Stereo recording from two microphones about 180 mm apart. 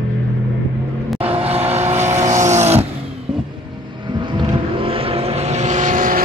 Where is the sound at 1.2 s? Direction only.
35° right (ahead or behind).